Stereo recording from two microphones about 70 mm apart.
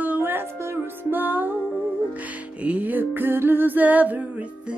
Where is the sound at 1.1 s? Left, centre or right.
Right.